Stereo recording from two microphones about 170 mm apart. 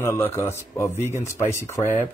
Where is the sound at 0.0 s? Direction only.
15° left (ahead or behind).